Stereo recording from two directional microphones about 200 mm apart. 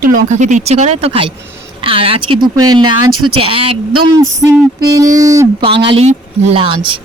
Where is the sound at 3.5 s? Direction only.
25° right (ahead or behind).